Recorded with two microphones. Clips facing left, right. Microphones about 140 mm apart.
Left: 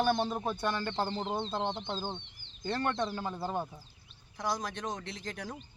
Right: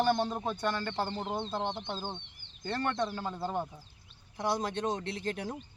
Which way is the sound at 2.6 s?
15° left (ahead or behind).